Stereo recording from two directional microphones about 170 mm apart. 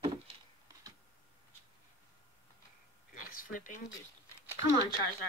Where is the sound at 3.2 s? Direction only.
55° left (ahead or behind).